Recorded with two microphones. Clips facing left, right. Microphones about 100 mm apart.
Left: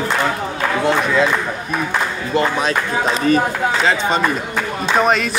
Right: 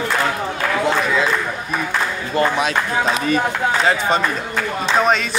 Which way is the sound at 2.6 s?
40° left (ahead or behind).